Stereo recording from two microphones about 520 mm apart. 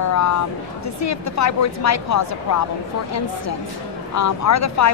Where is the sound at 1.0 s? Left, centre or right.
Left.